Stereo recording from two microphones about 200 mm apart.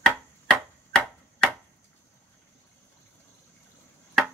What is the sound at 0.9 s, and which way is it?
Finger snapping, 5° left (ahead or behind).